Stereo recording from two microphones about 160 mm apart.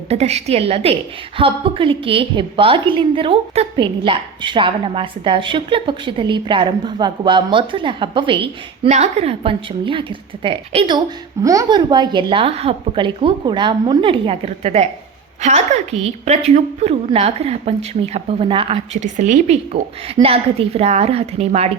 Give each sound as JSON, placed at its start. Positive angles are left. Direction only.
{"t": 0.1, "sound": "a woman's voice", "side_deg": -40}